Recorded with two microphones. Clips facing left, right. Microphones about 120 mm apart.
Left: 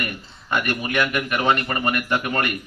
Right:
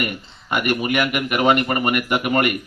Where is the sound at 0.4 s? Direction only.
15° right (ahead or behind).